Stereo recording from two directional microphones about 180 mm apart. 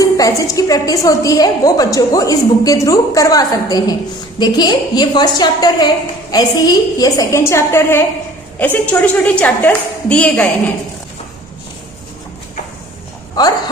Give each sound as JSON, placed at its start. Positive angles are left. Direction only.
{"t": 0.0, "sound": "a woman's voice", "side_deg": 20}